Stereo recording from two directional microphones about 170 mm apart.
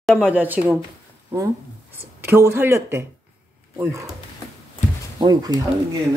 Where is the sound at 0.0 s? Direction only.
5° left (ahead or behind).